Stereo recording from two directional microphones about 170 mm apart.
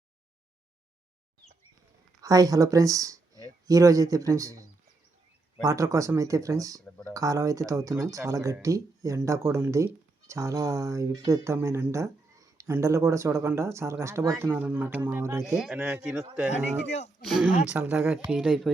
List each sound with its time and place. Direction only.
2.2 s speech: 20° right (ahead or behind)
15.4 s speech: centre (ahead or behind)
17.7 s speech: 10° right (ahead or behind)